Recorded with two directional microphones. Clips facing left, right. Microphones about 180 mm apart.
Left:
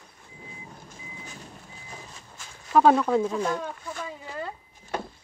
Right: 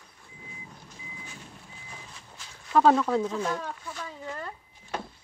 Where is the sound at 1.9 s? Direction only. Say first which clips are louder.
Left 3 dB; 40° left (ahead or behind).